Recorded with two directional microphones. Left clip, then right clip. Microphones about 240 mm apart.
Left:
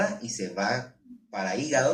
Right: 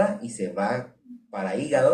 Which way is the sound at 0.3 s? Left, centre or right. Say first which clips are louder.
Right 2 dB; left.